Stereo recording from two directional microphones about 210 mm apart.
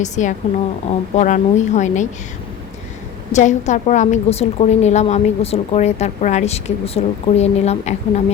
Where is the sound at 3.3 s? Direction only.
35° left (ahead or behind).